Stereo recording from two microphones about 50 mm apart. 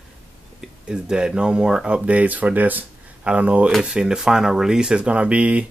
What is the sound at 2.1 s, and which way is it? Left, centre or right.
Speech, right.